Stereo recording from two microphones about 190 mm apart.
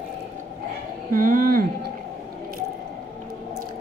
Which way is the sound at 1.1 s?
45° right (ahead or behind).